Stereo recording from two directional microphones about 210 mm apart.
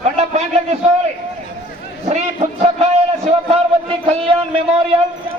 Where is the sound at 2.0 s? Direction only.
30° right (ahead or behind).